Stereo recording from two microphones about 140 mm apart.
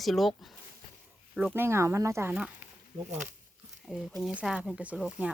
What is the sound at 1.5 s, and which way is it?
Speech, 20° right (ahead or behind).